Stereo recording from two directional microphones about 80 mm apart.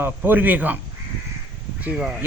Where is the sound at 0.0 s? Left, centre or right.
Right.